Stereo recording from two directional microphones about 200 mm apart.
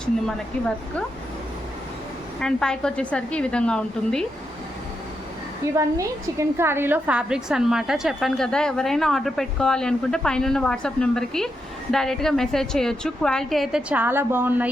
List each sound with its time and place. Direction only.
2.4 s a woman's voice: 5° left (ahead or behind)
5.7 s a woman's voice: 15° right (ahead or behind)